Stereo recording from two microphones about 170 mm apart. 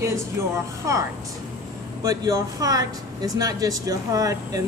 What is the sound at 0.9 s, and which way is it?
Speech, 20° right (ahead or behind).